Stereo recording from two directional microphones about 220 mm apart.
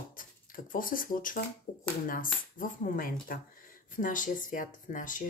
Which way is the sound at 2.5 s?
40° left (ahead or behind).